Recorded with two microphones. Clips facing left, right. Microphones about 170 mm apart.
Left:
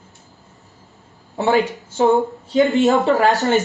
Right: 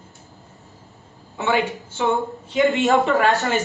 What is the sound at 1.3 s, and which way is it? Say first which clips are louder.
A man's voice: left 4 dB; 35° left (ahead or behind).